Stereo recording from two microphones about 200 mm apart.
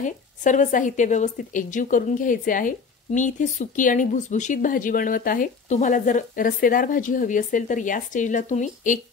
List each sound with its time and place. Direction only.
0.0 s speech: 40° left (ahead or behind)